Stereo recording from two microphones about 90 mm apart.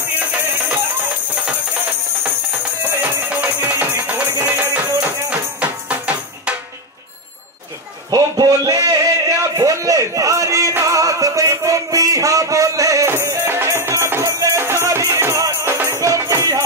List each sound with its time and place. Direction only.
1.3 s music: 15° right (ahead or behind)
2.8 s music: 25° right (ahead or behind)
8.1 s a sound: 45° right (ahead or behind)
10.7 s music: 35° right (ahead or behind)